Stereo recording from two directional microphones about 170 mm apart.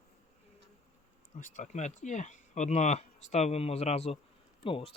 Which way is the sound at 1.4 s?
45° left (ahead or behind).